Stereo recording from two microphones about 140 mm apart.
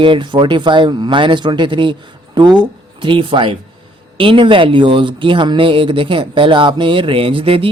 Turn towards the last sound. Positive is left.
turn(degrees=-40)  # may be behind; listen again after turning